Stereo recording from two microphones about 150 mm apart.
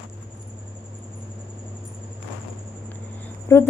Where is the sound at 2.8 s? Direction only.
15° left (ahead or behind).